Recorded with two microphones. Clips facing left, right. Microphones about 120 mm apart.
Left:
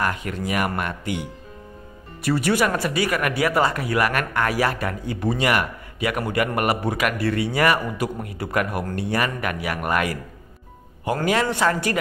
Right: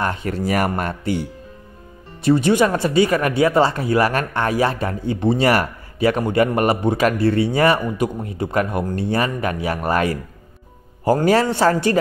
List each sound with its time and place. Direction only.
0.0 s speech: 30° right (ahead or behind)
2.2 s speech: 25° right (ahead or behind)
11.2 s speech: 35° right (ahead or behind)